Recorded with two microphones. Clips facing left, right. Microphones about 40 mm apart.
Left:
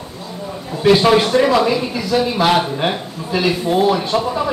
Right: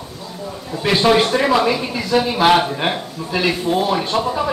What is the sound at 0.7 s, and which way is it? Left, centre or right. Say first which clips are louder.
Speech: left 3 dB; centre.